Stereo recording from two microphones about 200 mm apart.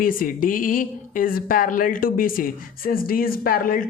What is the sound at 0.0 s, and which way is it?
Speech, 45° left (ahead or behind).